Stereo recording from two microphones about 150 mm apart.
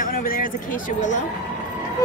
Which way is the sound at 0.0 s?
70° left (ahead or behind).